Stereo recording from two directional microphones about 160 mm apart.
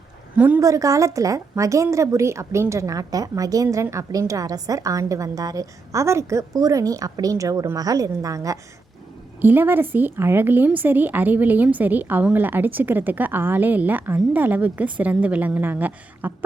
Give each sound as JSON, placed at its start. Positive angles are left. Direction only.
{"t": 0.3, "sound": "a woman's voice", "side_deg": -10}